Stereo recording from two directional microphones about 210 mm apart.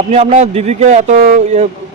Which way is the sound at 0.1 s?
30° right (ahead or behind).